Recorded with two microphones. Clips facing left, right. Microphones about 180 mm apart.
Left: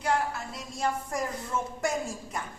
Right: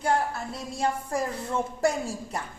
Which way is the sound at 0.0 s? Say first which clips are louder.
Right 2 dB; 30° right (ahead or behind).